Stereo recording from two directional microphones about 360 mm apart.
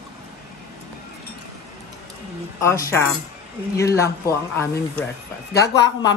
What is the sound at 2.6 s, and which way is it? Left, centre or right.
Speech, centre.